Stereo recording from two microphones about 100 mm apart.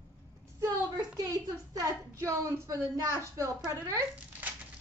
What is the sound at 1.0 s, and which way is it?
A woman's voice, 35° right (ahead or behind).